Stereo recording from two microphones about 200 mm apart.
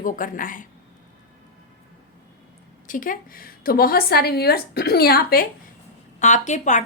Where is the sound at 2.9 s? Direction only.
40° left (ahead or behind).